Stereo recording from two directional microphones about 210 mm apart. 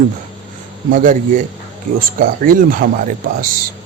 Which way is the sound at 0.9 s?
40° right (ahead or behind).